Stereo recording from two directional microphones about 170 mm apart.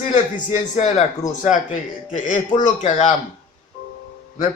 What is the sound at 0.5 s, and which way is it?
A man's voice, 45° left (ahead or behind).